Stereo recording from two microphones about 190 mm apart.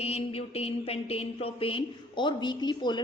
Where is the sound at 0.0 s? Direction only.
30° left (ahead or behind).